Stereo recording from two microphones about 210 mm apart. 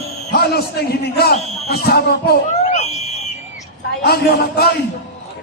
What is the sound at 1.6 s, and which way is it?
Speech, 50° left (ahead or behind).